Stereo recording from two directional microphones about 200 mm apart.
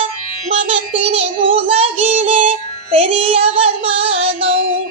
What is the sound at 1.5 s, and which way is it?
Music, 30° right (ahead or behind).